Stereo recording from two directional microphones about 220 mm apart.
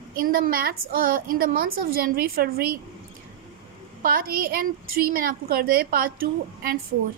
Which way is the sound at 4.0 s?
40° right (ahead or behind).